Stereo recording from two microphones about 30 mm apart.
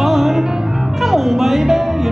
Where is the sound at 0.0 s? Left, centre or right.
Centre.